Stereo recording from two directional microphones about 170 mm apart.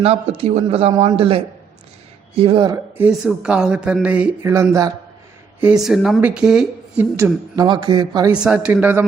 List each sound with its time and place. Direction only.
0.0 s a man's voice: 35° right (ahead or behind)
2.6 s speech: 15° right (ahead or behind)
5.8 s a woman's voice: centre (ahead or behind)
7.5 s speech: 25° right (ahead or behind)
8.3 s speech: 5° right (ahead or behind)